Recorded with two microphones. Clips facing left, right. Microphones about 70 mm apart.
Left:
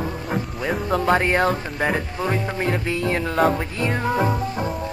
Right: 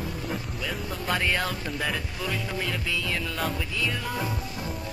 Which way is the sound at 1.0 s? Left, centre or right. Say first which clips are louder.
Left 8 dB; left.